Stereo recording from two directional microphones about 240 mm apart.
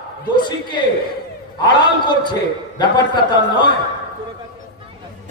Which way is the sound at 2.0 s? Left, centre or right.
Centre.